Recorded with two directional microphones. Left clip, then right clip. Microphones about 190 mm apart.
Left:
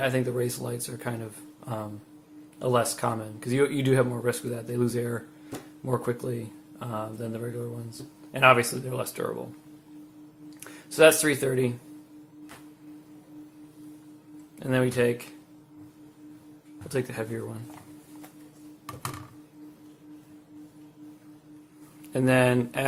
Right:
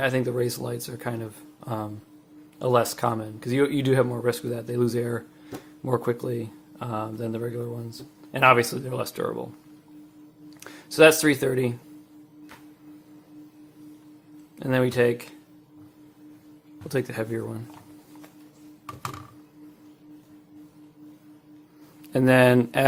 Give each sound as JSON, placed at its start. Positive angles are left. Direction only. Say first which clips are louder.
{"t": 0.0, "sound": "speech", "louder": "right 2 dB", "side_deg": -45}
{"t": 10.6, "sound": "speech", "louder": "right 2 dB", "side_deg": -45}
{"t": 14.6, "sound": "speech", "louder": "right 3 dB", "side_deg": -45}
{"t": 16.9, "sound": "speech", "louder": "right 3 dB", "side_deg": -40}
{"t": 22.1, "sound": "speech", "louder": "right 5 dB", "side_deg": -40}